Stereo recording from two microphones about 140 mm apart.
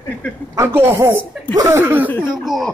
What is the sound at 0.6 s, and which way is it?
A man's voice, 15° right (ahead or behind).